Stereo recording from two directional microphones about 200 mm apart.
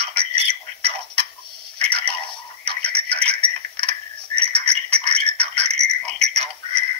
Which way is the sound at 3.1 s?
30° right (ahead or behind).